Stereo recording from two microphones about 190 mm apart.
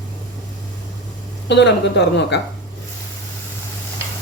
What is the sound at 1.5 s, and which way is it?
Speech, 65° left (ahead or behind).